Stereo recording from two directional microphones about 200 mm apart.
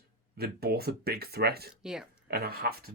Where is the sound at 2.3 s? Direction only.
50° right (ahead or behind).